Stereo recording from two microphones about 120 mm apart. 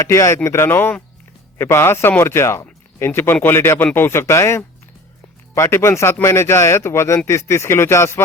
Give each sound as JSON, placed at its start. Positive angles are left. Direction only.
{"t": 0.0, "sound": "speech", "side_deg": 25}